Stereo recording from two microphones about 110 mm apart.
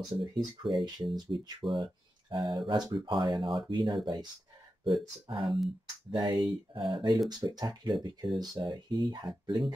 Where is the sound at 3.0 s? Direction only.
45° right (ahead or behind).